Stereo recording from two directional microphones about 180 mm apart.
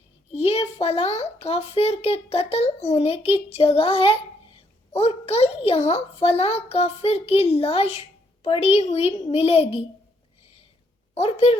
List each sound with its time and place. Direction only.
0.3 s a child's voice: 35° left (ahead or behind)
11.1 s a woman's voice: 35° left (ahead or behind)